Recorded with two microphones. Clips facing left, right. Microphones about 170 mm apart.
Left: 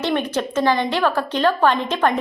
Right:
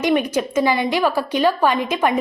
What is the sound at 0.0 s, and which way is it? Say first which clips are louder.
A woman's voice: right 3 dB; 10° right (ahead or behind).